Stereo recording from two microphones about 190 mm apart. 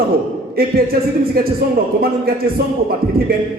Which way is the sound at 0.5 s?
50° right (ahead or behind).